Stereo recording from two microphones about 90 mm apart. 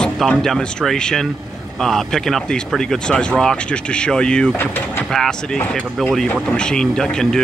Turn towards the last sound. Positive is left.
turn(degrees=5)  # may be behind; listen again after turning